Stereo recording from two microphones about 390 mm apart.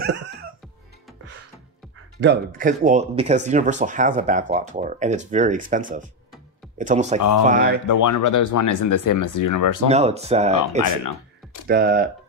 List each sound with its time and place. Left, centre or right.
0.0 s music: right
2.1 s speech: right
7.2 s speech: left
7.4 s speech: right
7.8 s speech: left
9.8 s speech: centre
11.6 s speech: right